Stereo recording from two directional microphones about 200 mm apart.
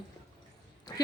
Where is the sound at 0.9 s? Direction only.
20° left (ahead or behind).